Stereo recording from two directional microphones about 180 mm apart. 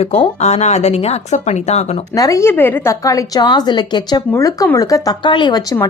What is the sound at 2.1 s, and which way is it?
A woman's voice, 20° left (ahead or behind).